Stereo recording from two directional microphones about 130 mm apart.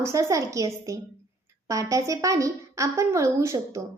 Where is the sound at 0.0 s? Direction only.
25° right (ahead or behind).